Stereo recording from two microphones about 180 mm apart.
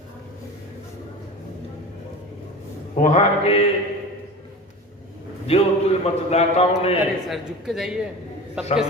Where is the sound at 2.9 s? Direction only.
40° left (ahead or behind).